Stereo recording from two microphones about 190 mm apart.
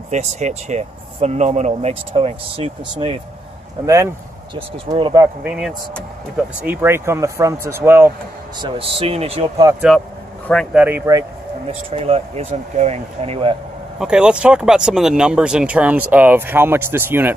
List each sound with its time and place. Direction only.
0.1 s speech: 35° right (ahead or behind)
3.8 s speech: 15° right (ahead or behind)
4.6 s speech: 30° right (ahead or behind)
5.4 s speech: 5° right (ahead or behind)
8.5 s speech: 25° right (ahead or behind)
9.8 s speech: centre (ahead or behind)
11.9 s speech: 30° right (ahead or behind)
13.9 s speech: 5° right (ahead or behind)